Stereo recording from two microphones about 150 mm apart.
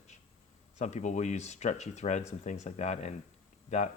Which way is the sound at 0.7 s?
50° left (ahead or behind).